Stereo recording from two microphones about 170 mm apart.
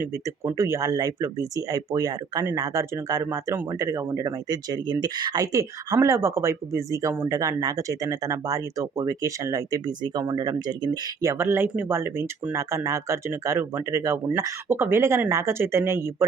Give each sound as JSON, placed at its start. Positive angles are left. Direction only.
{"t": 0.0, "sound": "speech", "side_deg": -15}